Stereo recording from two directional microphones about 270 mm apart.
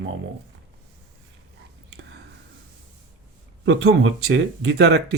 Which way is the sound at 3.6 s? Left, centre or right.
Right.